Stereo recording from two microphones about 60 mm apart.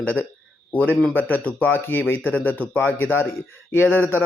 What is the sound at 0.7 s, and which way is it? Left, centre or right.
Speech, left.